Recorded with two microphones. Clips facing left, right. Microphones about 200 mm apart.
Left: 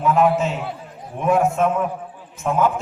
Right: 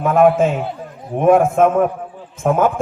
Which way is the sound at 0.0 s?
55° right (ahead or behind).